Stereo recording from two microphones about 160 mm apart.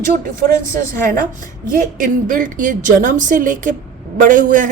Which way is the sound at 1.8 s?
60° right (ahead or behind).